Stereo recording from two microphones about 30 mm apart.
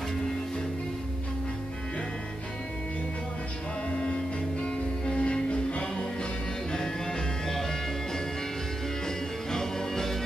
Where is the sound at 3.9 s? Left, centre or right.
Left.